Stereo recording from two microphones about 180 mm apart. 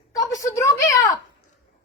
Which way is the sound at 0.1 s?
20° left (ahead or behind).